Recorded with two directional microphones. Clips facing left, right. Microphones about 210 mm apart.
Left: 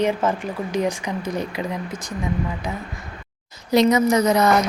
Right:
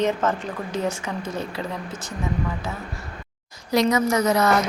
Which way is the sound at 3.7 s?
20° left (ahead or behind).